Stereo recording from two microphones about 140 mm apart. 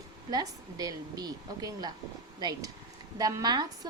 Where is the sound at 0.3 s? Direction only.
25° right (ahead or behind).